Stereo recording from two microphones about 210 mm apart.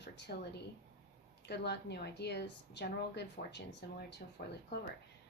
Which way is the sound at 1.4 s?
50° left (ahead or behind).